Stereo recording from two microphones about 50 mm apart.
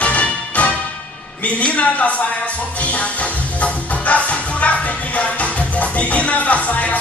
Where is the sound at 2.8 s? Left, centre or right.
Left.